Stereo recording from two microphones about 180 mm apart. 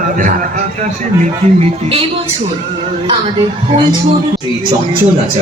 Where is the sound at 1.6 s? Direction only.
35° right (ahead or behind).